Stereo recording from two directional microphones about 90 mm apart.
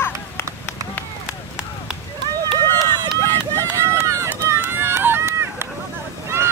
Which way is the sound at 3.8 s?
35° right (ahead or behind).